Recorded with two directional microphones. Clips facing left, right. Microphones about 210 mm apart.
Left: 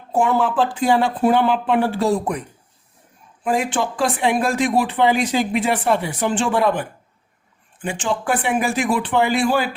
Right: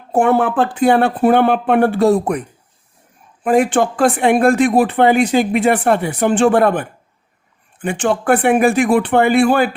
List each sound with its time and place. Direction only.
0.1 s a man's voice: 60° right (ahead or behind)
3.4 s a man's voice: 55° right (ahead or behind)